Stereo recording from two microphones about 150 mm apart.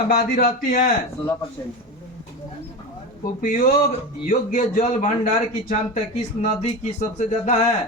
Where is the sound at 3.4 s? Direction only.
65° left (ahead or behind).